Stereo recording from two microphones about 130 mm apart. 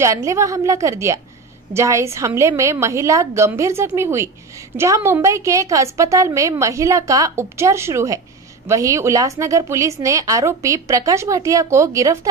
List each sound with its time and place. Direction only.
0.0 s a woman's voice: 25° right (ahead or behind)